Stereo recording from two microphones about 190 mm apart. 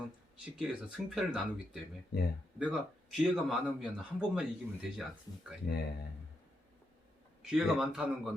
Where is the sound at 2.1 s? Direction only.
55° left (ahead or behind).